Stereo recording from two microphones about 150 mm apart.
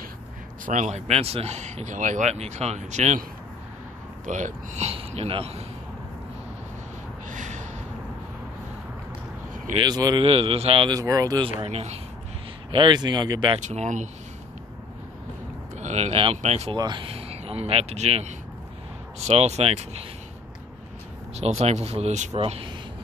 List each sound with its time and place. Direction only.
0.7 s speech: 50° right (ahead or behind)
4.3 s speech: 55° right (ahead or behind)
7.2 s a sound: 55° right (ahead or behind)
9.8 s speech: 25° right (ahead or behind)
10.2 s speech: 40° right (ahead or behind)
11.0 s speech: 25° right (ahead or behind)
11.6 s speech: 45° right (ahead or behind)
12.7 s speech: 30° right (ahead or behind)
13.6 s speech: 55° right (ahead or behind)
15.8 s speech: 45° right (ahead or behind)
16.7 s speech: 30° right (ahead or behind); by 20.0 s 45° right (ahead or behind)
21.4 s speech: 45° right (ahead or behind)
22.4 s speech: 40° right (ahead or behind)